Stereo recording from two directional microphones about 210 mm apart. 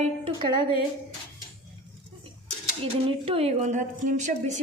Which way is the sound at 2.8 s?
25° right (ahead or behind).